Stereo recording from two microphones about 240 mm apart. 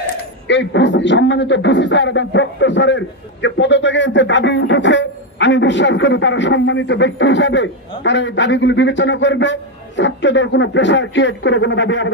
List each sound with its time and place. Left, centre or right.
0.5 s a man's voice: left